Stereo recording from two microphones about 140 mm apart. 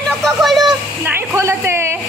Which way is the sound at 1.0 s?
20° right (ahead or behind).